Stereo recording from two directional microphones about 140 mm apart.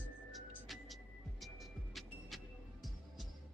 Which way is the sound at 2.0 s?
Centre (ahead or behind).